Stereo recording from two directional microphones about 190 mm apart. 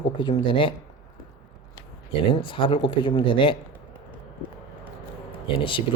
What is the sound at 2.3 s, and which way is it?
Speech, 25° left (ahead or behind).